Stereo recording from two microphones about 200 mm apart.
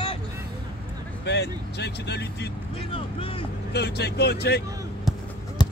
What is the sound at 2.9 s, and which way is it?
Speech, 25° left (ahead or behind).